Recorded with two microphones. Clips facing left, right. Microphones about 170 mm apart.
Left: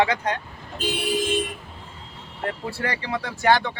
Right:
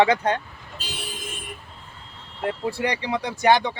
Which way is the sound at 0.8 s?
70° left (ahead or behind).